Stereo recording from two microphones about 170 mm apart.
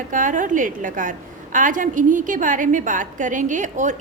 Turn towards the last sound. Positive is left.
turn(degrees=-45)  # may be behind; listen again after turning